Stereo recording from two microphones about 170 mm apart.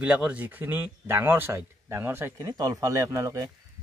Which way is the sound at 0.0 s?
5° right (ahead or behind).